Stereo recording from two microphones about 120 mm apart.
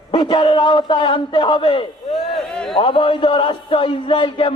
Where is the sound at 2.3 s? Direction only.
5° left (ahead or behind).